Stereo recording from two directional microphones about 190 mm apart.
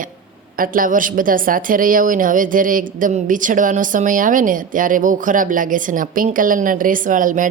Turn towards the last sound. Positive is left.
turn(degrees=-45)  # may be behind; listen again after turning